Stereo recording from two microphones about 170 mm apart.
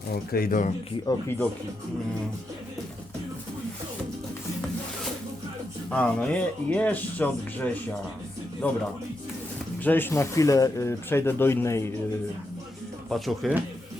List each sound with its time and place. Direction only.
0.3 s speech: 60° left (ahead or behind)
1.0 s speech: 15° left (ahead or behind)
5.9 s speech: 5° left (ahead or behind)
9.8 s speech: 10° left (ahead or behind)
13.1 s speech: centre (ahead or behind)